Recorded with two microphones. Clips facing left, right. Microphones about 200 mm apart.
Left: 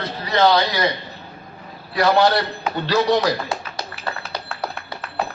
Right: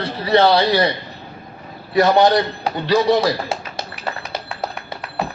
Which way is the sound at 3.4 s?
25° right (ahead or behind).